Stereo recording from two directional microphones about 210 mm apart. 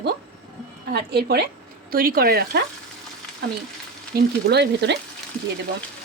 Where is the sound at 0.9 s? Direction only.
50° right (ahead or behind).